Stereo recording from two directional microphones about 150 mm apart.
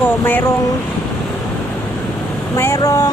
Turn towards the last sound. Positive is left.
turn(degrees=25)  # may be behind; listen again after turning